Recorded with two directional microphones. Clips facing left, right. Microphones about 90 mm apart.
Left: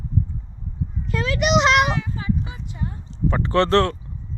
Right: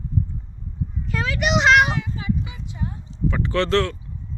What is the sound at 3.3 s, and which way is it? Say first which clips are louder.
Speech: left 3 dB; 40° left (ahead or behind).